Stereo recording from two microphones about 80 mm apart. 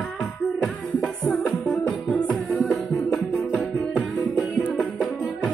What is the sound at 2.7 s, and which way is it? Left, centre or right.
Music, centre.